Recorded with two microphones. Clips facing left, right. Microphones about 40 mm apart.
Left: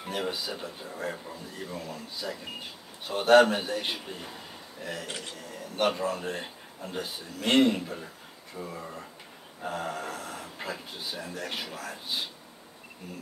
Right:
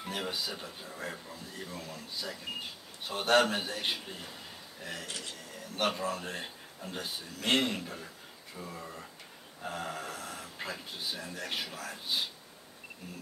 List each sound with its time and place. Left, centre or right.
0.0 s speech: centre
5.0 s speech: centre
5.3 s speech: centre